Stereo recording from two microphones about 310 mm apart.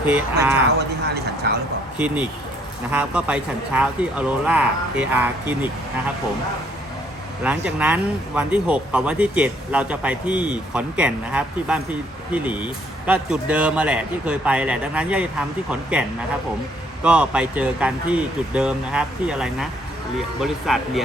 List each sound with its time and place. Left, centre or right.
0.5 s speech: right
2.0 s speech: centre
7.4 s speech: centre